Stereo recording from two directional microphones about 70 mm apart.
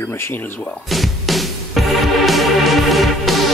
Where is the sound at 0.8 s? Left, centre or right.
Centre.